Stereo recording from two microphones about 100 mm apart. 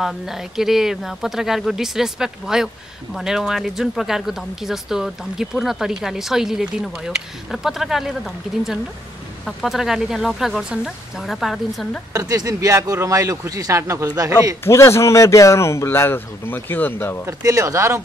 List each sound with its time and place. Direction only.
0.0 s speech: 5° right (ahead or behind)
12.1 s speech: 35° right (ahead or behind)
14.6 s speech: 25° left (ahead or behind)
17.3 s speech: 35° right (ahead or behind)